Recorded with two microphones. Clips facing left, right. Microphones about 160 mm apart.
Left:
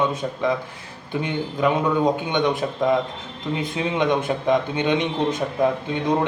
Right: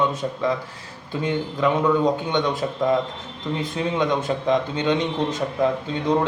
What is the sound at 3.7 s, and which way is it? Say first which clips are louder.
Speech: left 1 dB; 20° left (ahead or behind).